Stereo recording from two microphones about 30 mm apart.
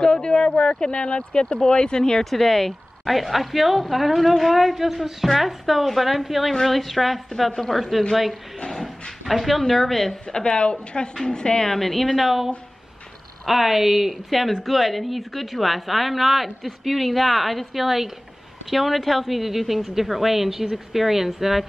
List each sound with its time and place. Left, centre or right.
0.0 s a sound: left
0.7 s speech: left
3.1 s a woman's voice: centre
9.2 s a woman's voice: centre
10.2 s speech: left
11.1 s a woman's voice: left
11.7 s speech: centre
13.5 s a woman's voice: centre
19.9 s a woman's voice: centre